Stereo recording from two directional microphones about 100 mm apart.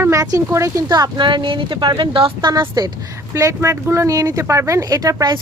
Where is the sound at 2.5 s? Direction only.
40° right (ahead or behind).